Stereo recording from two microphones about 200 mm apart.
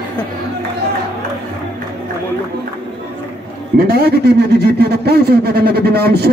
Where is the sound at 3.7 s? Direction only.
55° right (ahead or behind).